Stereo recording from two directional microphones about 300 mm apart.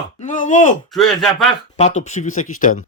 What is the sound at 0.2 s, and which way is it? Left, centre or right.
Speech, left.